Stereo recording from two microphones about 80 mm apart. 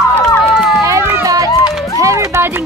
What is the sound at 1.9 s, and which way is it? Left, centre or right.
Music, right.